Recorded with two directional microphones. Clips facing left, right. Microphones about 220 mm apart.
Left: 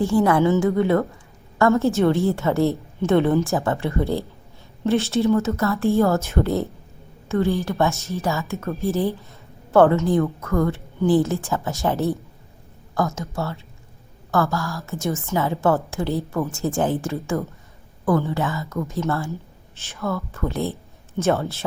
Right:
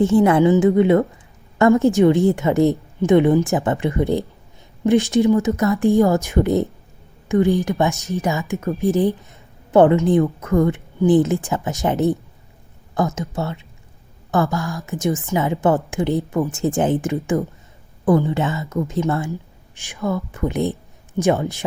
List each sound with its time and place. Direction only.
0.0 s a woman's voice: 20° right (ahead or behind)